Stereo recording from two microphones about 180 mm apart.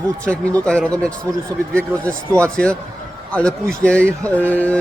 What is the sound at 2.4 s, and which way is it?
Speech, 5° left (ahead or behind).